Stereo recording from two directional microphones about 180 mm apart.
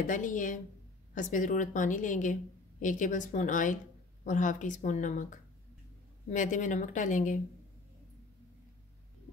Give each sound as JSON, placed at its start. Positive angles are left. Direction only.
{"t": 0.0, "sound": "a woman's voice", "side_deg": 45}